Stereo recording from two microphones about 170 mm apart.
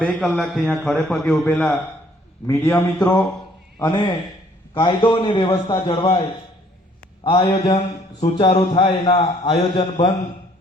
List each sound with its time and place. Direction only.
0.0 s a man's voice: centre (ahead or behind)
2.5 s speech: 15° left (ahead or behind)
3.8 s a man's voice: 25° left (ahead or behind)
7.3 s a man's voice: 30° left (ahead or behind)
7.6 s a man's voice: 40° left (ahead or behind)